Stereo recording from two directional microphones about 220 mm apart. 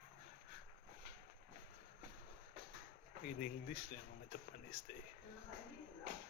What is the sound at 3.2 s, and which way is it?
Speech, 40° left (ahead or behind).